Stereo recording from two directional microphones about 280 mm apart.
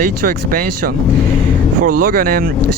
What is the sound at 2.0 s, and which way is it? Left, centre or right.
Speech, right.